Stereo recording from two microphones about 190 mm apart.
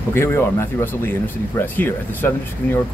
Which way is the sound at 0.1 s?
10° left (ahead or behind).